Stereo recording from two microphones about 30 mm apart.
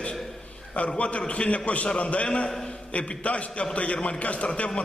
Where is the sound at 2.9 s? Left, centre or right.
Left.